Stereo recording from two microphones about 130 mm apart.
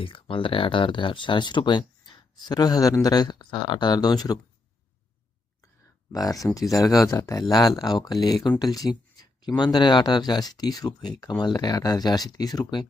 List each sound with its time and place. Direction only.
0.0 s speech: 45° left (ahead or behind)
6.1 s speech: 30° left (ahead or behind)